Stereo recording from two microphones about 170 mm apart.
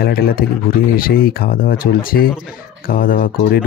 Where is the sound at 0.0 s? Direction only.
65° left (ahead or behind).